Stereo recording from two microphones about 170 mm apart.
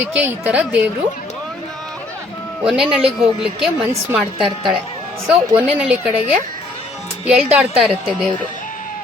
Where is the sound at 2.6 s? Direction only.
5° right (ahead or behind).